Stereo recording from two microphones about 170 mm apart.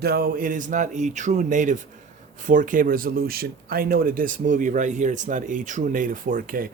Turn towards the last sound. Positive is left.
turn(degrees=-55)  # may be behind; listen again after turning